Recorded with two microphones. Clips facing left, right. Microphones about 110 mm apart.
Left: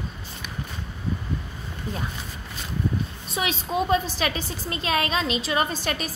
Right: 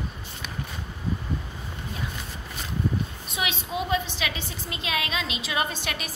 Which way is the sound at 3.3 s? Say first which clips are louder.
Left 4 dB; 40° left (ahead or behind).